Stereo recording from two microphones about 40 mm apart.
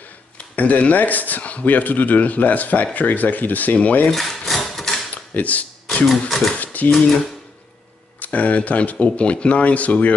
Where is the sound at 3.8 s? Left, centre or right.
Left.